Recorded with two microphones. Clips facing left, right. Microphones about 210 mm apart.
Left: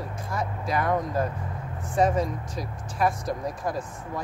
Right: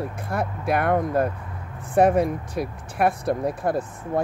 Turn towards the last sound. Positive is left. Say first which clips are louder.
# right 6 dB
turn(degrees=-60)  # may be behind; listen again after turning